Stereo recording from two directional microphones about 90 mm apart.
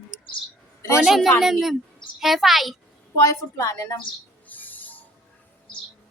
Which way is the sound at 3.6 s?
35° left (ahead or behind).